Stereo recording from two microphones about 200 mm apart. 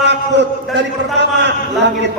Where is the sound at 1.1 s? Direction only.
60° right (ahead or behind).